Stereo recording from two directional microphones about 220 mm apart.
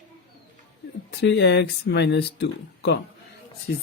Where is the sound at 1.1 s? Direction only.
50° left (ahead or behind).